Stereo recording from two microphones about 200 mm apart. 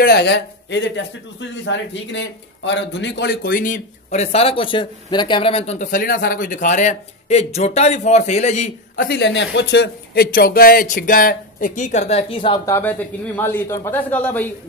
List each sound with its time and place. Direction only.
0.0 s a man's voice: 55° left (ahead or behind); by 8.6 s 35° left (ahead or behind)
8.9 s a man's voice: 55° left (ahead or behind); by 14.5 s 10° left (ahead or behind)